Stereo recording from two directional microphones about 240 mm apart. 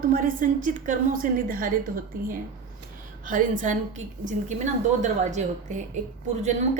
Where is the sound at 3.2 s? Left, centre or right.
Right.